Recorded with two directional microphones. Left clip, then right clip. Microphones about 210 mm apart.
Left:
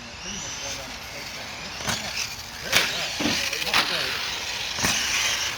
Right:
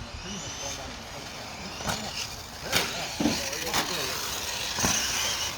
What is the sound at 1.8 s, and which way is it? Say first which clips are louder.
Vehicle: left 4 dB; 10° left (ahead or behind).